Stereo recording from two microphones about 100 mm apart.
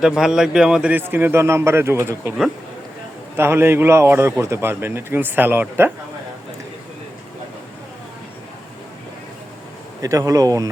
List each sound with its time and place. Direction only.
0.0 s a man's voice: 5° right (ahead or behind); by 2.3 s 25° right (ahead or behind)
3.3 s a man's voice: 25° right (ahead or behind)
10.0 s speech: 35° right (ahead or behind)